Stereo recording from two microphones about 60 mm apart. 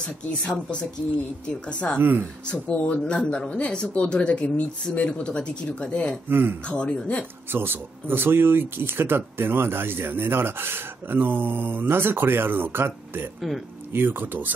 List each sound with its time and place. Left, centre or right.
0.0 s speech: centre
2.0 s speech: right
2.4 s speech: left
6.2 s speech: right
6.7 s speech: centre
7.5 s speech: right